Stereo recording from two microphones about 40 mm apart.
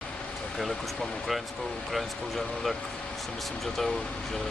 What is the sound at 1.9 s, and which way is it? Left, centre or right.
Speech, centre.